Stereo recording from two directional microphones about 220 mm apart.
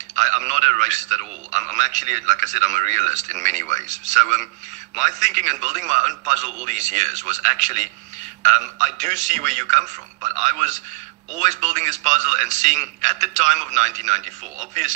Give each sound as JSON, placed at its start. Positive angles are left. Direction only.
{"t": 0.1, "sound": "a man's voice", "side_deg": -35}